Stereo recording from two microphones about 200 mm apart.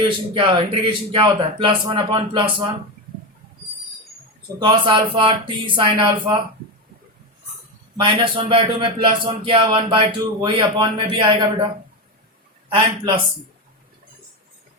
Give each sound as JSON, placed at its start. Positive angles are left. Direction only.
{"t": 0.0, "sound": "a man's voice", "side_deg": -25}
{"t": 4.6, "sound": "a man's voice", "side_deg": -25}
{"t": 7.9, "sound": "a man's voice", "side_deg": -25}